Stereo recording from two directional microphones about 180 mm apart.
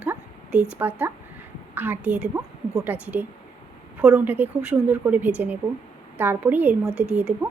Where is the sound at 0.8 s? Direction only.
10° right (ahead or behind).